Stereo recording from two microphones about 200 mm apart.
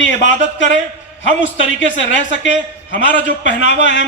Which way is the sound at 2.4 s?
65° left (ahead or behind).